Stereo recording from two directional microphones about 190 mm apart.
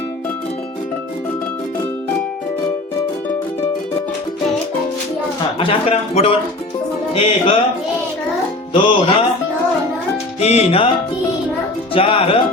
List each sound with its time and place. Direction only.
5.5 s a man's voice: 30° left (ahead or behind)
8.7 s speech: 25° left (ahead or behind)
10.4 s a man's voice: 35° left (ahead or behind)
11.9 s speech: 30° left (ahead or behind)